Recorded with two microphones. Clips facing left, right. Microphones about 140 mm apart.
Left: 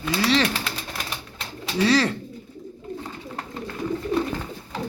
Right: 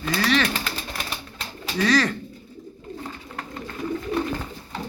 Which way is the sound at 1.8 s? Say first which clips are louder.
Left 1 dB; 30° left (ahead or behind).